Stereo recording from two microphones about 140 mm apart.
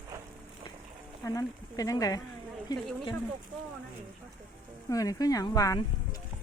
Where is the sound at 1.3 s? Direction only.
25° left (ahead or behind).